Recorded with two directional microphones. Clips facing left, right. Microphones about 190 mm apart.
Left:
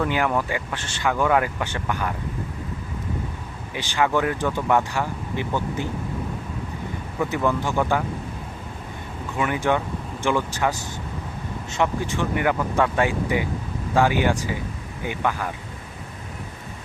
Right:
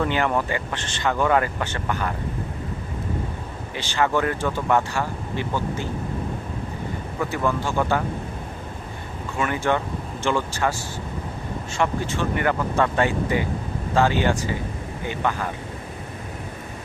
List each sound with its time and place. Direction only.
0.0 s speech: 10° left (ahead or behind)
3.8 s speech: 15° left (ahead or behind)
7.2 s speech: 15° left (ahead or behind)
9.4 s speech: 15° left (ahead or behind)